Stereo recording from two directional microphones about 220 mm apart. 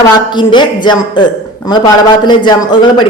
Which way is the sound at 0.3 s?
20° left (ahead or behind).